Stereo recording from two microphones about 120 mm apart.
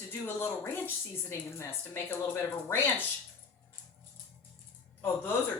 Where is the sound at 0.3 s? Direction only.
20° left (ahead or behind).